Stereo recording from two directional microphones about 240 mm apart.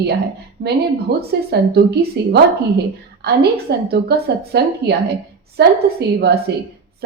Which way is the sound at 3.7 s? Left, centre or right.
Right.